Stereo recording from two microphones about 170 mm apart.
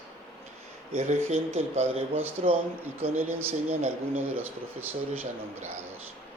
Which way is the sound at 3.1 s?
10° right (ahead or behind).